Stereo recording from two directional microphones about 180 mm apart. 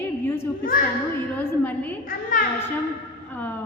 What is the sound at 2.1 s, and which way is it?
Speech, 50° left (ahead or behind).